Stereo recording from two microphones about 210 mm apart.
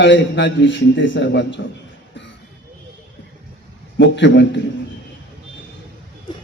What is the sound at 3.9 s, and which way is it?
Speech, 60° left (ahead or behind).